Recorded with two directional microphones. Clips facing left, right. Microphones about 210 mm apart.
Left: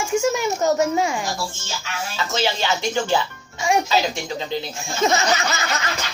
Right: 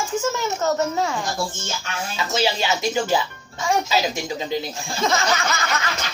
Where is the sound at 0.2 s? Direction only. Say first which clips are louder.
Left 3 dB; 10° left (ahead or behind).